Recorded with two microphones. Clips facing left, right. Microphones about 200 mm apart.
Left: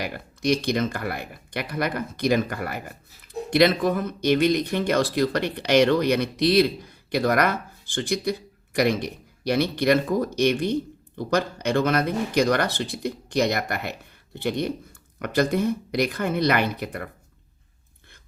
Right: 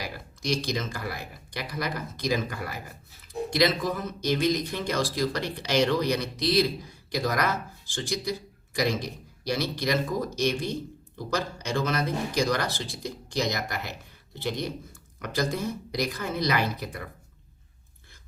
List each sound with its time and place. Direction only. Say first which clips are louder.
0.0 s speech: left 8 dB; 60° left (ahead or behind)